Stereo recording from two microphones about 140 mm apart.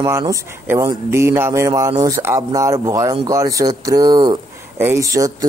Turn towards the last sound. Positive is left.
turn(degrees=-25)  # may be behind; listen again after turning